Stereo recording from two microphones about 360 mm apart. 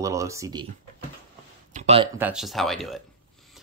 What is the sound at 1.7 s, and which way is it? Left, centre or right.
Speech, centre.